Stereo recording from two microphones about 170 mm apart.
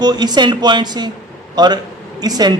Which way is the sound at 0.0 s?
25° right (ahead or behind).